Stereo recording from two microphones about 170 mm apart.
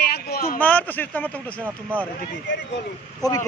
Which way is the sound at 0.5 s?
10° left (ahead or behind).